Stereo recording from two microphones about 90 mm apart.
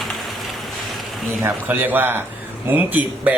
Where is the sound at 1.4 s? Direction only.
20° right (ahead or behind).